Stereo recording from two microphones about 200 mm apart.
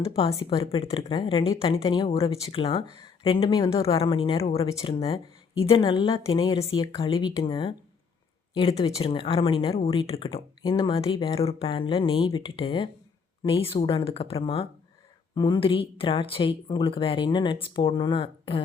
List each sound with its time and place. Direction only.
0.3 s speech: 15° left (ahead or behind)
0.6 s speech: 25° left (ahead or behind)
4.7 s speech: 15° left (ahead or behind)
4.9 s speech: 30° left (ahead or behind)